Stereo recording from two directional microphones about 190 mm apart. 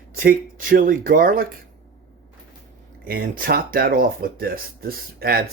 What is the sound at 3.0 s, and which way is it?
Speech, 50° right (ahead or behind).